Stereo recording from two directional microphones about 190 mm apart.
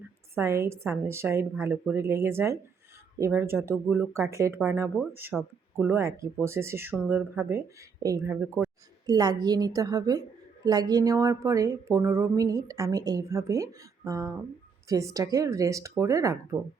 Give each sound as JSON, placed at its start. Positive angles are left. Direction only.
{"t": 0.3, "sound": "a woman's voice", "side_deg": -15}
{"t": 9.0, "sound": "a woman's voice", "side_deg": -20}